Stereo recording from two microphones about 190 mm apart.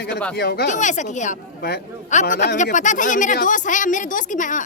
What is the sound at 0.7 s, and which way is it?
A woman's voice, 40° left (ahead or behind).